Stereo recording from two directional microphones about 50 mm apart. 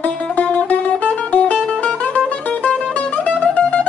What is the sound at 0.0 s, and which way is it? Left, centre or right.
Music, left.